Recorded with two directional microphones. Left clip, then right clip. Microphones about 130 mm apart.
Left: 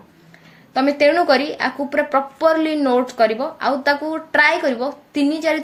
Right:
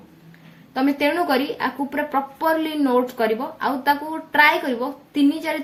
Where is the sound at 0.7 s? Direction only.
10° left (ahead or behind).